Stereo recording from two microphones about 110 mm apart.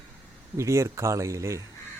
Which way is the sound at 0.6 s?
25° right (ahead or behind).